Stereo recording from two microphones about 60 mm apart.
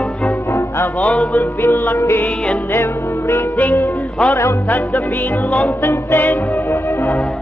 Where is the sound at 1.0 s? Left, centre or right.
Left.